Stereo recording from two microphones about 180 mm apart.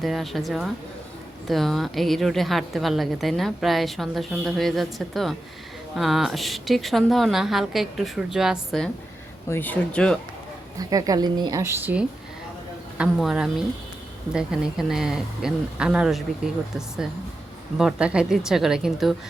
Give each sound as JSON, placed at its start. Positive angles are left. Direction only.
{"t": 0.0, "sound": "a woman's voice", "side_deg": 0}
{"t": 9.5, "sound": "speech", "side_deg": 10}
{"t": 10.8, "sound": "a woman's voice", "side_deg": -20}